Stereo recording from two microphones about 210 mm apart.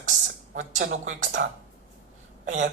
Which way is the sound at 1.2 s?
60° right (ahead or behind).